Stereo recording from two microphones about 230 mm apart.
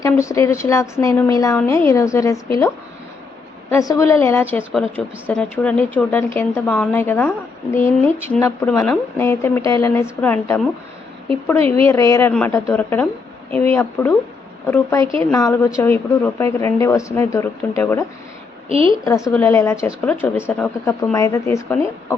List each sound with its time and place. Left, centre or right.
0.0 s a woman's voice: centre
3.7 s a woman's voice: centre
11.8 s a woman's voice: centre
18.7 s a woman's voice: right
19.0 s a woman's voice: centre